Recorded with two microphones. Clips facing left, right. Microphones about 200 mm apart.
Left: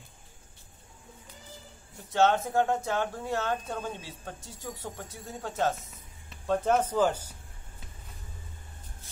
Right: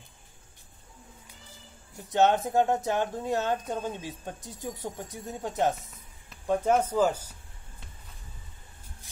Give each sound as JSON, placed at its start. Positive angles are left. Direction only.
{"t": 2.1, "sound": "speech", "side_deg": -15}